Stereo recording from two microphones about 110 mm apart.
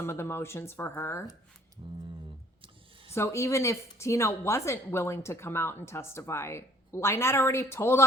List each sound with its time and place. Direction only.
0.0 s a woman's voice: 25° left (ahead or behind)
1.8 s a sound: 50° right (ahead or behind)
3.1 s a woman's voice: 25° left (ahead or behind)